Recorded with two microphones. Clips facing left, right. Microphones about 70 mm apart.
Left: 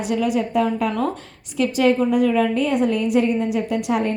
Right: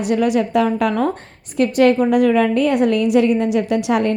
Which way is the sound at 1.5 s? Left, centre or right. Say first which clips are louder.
Right 4 dB; right.